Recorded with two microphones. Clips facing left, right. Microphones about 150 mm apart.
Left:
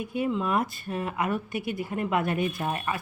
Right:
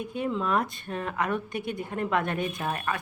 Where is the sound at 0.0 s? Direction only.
10° left (ahead or behind).